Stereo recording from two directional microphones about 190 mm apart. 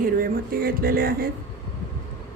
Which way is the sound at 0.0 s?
50° right (ahead or behind).